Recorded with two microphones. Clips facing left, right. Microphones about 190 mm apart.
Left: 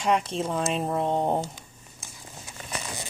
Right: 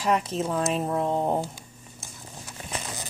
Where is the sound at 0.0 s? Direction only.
5° right (ahead or behind).